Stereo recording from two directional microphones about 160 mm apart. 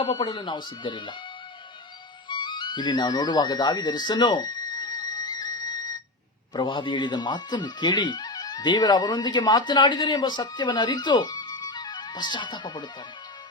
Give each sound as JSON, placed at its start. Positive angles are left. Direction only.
{"t": 0.0, "sound": "speech", "side_deg": 30}
{"t": 2.3, "sound": "music", "side_deg": 30}
{"t": 6.5, "sound": "speech", "side_deg": 30}